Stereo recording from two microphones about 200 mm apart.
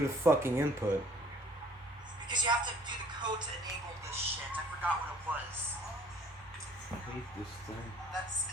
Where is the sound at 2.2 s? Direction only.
20° right (ahead or behind).